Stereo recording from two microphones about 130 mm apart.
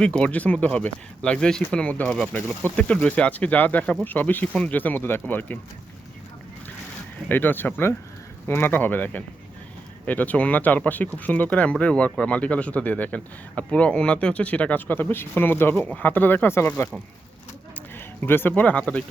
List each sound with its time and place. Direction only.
0.0 s speech: 10° left (ahead or behind)
7.3 s speech: 15° left (ahead or behind)
17.9 s speech: 15° left (ahead or behind)